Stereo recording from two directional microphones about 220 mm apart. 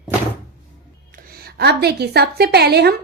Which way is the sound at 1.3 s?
45° right (ahead or behind).